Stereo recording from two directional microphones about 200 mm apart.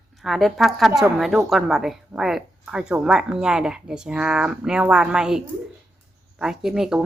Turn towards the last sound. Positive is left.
turn(degrees=-5)  # may be behind; listen again after turning